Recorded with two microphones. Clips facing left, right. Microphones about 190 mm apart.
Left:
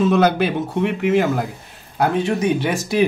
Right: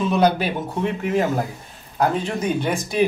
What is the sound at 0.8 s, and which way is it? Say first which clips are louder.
Speech: left 4 dB; 75° left (ahead or behind).